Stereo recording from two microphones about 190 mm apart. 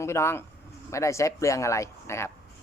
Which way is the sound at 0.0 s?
15° left (ahead or behind).